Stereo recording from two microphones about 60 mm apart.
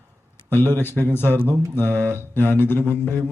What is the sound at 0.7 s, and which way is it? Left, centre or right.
Speech, left.